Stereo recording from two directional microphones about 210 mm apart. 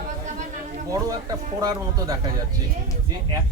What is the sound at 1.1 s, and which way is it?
A man's voice, 20° right (ahead or behind).